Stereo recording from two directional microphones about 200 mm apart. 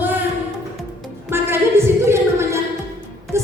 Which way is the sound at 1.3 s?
10° right (ahead or behind).